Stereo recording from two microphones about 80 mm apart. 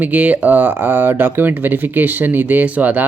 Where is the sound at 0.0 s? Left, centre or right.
Centre.